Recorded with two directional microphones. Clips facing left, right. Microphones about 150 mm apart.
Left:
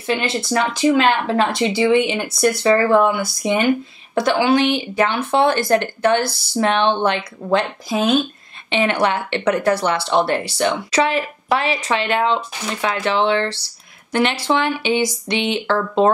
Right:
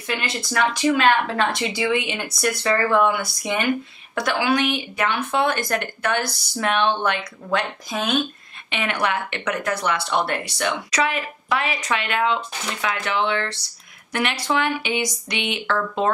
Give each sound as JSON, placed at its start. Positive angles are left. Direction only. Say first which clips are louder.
{"t": 0.0, "sound": "a woman's voice", "louder": "left 6 dB", "side_deg": 30}